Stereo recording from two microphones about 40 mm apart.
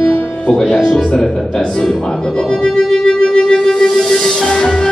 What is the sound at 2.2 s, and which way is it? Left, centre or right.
Music, centre.